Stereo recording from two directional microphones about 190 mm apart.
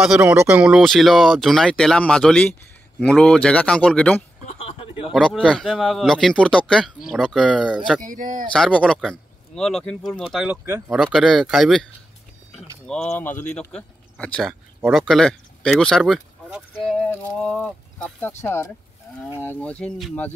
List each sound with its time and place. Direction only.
0.0 s speech: 5° right (ahead or behind)
4.5 s a sound: 30° left (ahead or behind)
5.1 s speech: centre (ahead or behind)
8.0 s speech: 45° right (ahead or behind)
8.5 s speech: 5° left (ahead or behind)
12.5 s vehicle: 5° left (ahead or behind)
13.1 s speech: 10° left (ahead or behind)